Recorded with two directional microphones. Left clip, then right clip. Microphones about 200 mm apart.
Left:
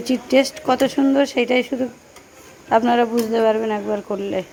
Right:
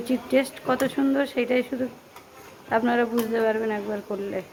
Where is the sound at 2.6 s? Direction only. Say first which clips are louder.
Left 7 dB; 20° left (ahead or behind).